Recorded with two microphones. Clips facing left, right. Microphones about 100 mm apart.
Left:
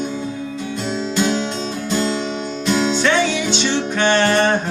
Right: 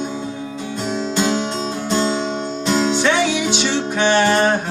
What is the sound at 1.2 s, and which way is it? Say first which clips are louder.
Music: even; 30° right (ahead or behind).